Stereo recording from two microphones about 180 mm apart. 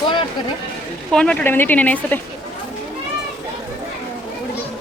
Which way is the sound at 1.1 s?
5° left (ahead or behind).